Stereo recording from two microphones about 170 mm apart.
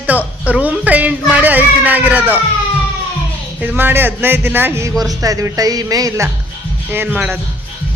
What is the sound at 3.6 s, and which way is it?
A woman's voice, 10° right (ahead or behind).